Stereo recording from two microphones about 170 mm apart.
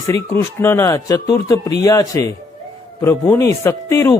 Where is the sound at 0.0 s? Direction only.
15° left (ahead or behind).